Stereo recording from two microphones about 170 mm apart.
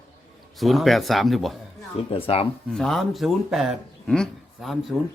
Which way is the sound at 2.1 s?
35° left (ahead or behind).